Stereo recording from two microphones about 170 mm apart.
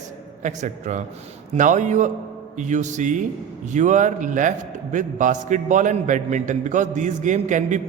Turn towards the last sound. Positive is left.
turn(degrees=-45)  # may be behind; listen again after turning